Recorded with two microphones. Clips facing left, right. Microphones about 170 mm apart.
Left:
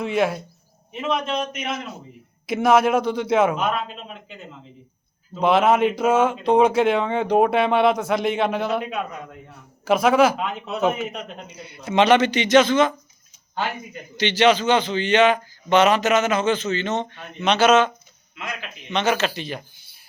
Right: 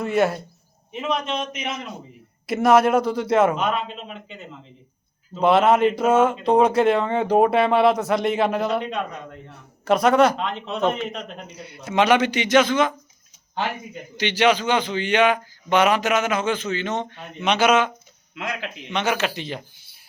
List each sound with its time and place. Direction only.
0.0 s speech: centre (ahead or behind)
14.2 s a man's voice: 10° right (ahead or behind)
18.3 s a man's voice: 90° right
18.9 s a man's voice: 10° right (ahead or behind)